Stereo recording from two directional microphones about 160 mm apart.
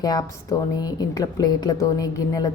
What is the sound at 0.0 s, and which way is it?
A woman's voice, 20° left (ahead or behind).